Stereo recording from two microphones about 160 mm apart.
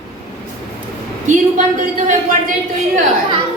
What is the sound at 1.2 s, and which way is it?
Speech, 50° right (ahead or behind).